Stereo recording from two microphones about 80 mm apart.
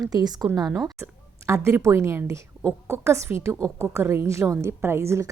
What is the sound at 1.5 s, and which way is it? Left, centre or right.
A woman's voice, right.